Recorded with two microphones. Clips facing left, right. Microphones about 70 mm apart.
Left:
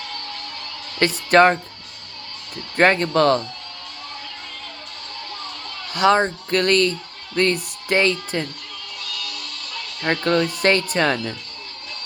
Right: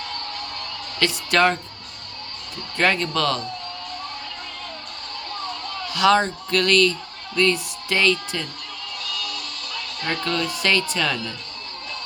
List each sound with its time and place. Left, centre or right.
0.9 s speech: left
2.7 s speech: left
5.9 s speech: left
10.0 s speech: left